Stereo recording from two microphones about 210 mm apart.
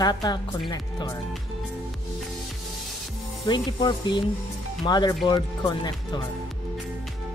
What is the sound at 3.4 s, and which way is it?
Speech, 20° left (ahead or behind).